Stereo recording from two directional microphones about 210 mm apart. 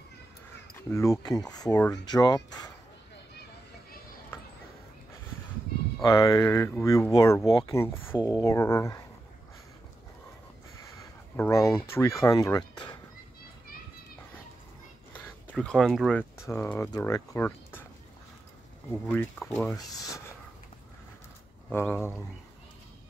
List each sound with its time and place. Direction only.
0.8 s speech: 15° left (ahead or behind)
6.0 s speech: 15° left (ahead or behind)
11.3 s speech: 10° left (ahead or behind)
15.4 s speech: 5° left (ahead or behind)
16.3 s speech: 10° left (ahead or behind)
19.0 s speech: 5° left (ahead or behind)
21.7 s speech: 10° left (ahead or behind)